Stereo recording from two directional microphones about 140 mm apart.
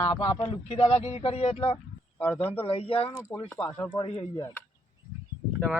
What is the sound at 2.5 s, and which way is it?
Speech, 45° left (ahead or behind).